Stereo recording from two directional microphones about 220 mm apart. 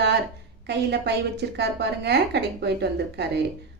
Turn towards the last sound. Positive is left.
turn(degrees=-50)  # may be behind; listen again after turning